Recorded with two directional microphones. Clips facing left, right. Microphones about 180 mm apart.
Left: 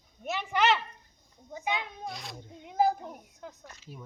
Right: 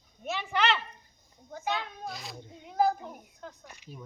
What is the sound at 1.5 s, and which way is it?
Children playing, 15° left (ahead or behind).